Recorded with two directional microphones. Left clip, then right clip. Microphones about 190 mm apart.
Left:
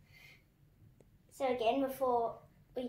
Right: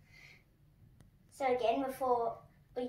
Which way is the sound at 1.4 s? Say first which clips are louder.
Right 1 dB; 70° left (ahead or behind).